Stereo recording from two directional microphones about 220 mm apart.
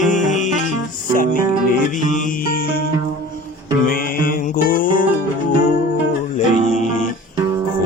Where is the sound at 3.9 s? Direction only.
40° left (ahead or behind).